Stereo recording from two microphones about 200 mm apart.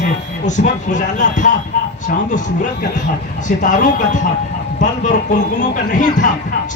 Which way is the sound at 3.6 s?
40° left (ahead or behind).